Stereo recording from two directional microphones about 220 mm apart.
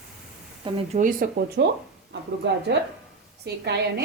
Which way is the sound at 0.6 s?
25° right (ahead or behind).